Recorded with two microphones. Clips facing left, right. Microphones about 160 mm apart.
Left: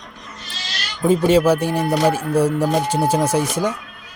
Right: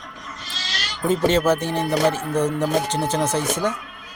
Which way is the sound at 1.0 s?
10° left (ahead or behind).